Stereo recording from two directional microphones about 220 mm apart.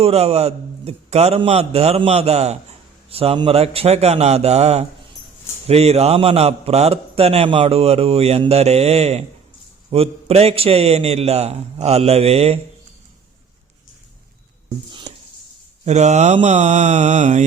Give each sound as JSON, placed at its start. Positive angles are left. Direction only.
{"t": 0.0, "sound": "a man's voice", "side_deg": -25}
{"t": 14.8, "sound": "music", "side_deg": -20}
{"t": 15.8, "sound": "mantra", "side_deg": -30}